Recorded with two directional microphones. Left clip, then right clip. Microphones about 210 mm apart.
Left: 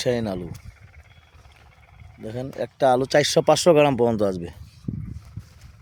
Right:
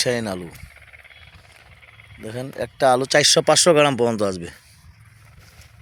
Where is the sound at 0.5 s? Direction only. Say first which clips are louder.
Right 6 dB; 45° left (ahead or behind).